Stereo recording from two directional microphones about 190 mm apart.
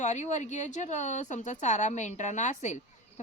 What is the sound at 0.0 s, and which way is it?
Speech, 40° left (ahead or behind).